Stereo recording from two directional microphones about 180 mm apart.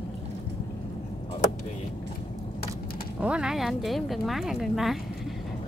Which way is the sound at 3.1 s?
5° right (ahead or behind).